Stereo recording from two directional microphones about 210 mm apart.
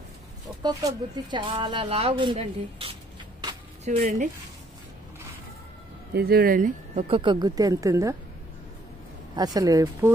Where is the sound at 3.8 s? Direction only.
40° right (ahead or behind).